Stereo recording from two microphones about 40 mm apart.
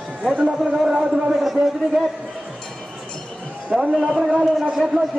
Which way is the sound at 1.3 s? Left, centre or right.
Centre.